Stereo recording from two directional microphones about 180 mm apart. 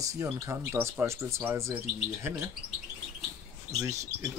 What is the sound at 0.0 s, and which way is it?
Speech, 20° right (ahead or behind).